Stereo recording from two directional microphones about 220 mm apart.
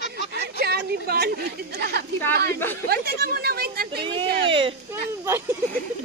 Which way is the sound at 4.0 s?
25° right (ahead or behind).